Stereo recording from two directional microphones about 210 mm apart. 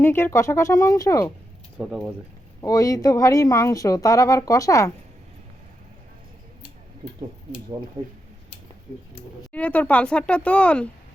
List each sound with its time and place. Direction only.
0.0 s a woman's voice: 10° left (ahead or behind)
1.8 s speech: 5° right (ahead or behind)
2.6 s a woman's voice: 15° left (ahead or behind)
9.5 s a woman's voice: 5° left (ahead or behind)